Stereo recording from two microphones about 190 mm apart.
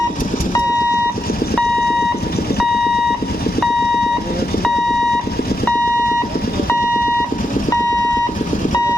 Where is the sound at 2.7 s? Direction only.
55° left (ahead or behind).